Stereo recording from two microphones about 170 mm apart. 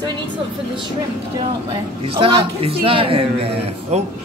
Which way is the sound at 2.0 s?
30° right (ahead or behind).